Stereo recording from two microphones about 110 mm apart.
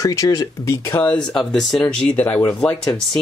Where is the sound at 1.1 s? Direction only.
5° left (ahead or behind).